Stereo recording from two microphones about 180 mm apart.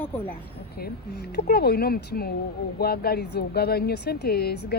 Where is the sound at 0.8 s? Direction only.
60° left (ahead or behind).